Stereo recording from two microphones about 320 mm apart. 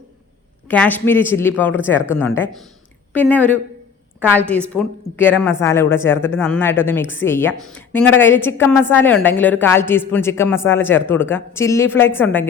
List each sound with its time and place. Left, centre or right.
0.7 s a woman's voice: centre